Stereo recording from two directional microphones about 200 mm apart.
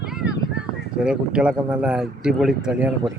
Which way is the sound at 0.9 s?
5° right (ahead or behind).